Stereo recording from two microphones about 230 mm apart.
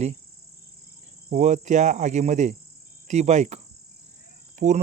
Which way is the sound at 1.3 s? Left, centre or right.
Right.